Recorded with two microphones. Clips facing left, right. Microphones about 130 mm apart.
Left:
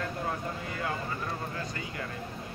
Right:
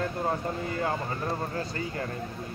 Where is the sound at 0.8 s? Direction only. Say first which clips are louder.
Right 2 dB; 35° right (ahead or behind).